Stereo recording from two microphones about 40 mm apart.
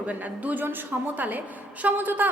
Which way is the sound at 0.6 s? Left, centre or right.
Right.